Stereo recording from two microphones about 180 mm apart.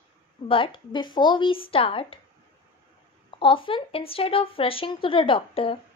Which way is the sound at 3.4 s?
30° left (ahead or behind).